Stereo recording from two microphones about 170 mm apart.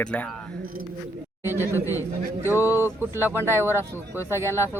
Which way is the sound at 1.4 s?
15° right (ahead or behind).